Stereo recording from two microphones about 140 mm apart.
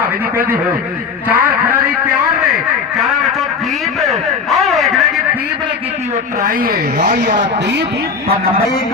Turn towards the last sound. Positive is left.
turn(degrees=-65)  # may be behind; listen again after turning